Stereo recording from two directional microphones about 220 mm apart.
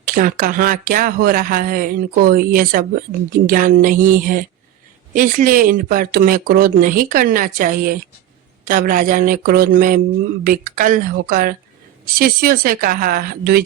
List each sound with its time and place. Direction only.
0.1 s speech: 40° right (ahead or behind)